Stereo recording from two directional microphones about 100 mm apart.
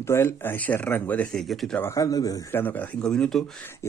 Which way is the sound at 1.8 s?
30° left (ahead or behind).